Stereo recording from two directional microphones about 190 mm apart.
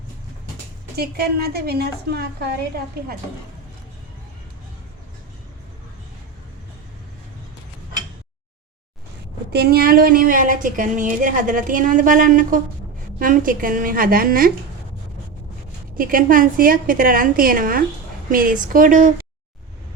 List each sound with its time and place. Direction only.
0.9 s a woman's voice: 55° right (ahead or behind)
9.5 s speech: 55° right (ahead or behind)
16.0 s speech: 50° right (ahead or behind)